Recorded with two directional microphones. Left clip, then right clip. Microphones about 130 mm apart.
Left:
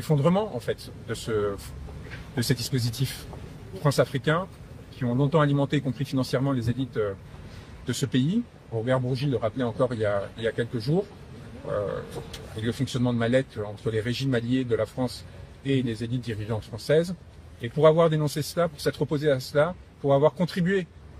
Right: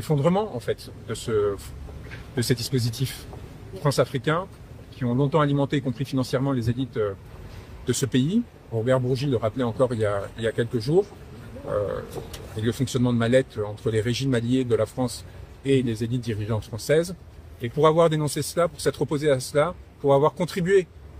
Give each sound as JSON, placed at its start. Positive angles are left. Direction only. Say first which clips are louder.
{"t": 0.0, "sound": "a man's voice", "louder": "right 1 dB", "side_deg": -45}
{"t": 12.6, "sound": "a man's voice", "louder": "right 3 dB", "side_deg": -50}